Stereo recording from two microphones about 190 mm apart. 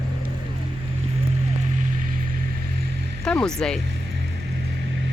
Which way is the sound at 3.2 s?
5° left (ahead or behind).